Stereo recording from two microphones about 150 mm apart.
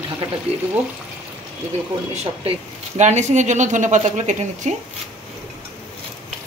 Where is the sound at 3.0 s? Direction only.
50° right (ahead or behind).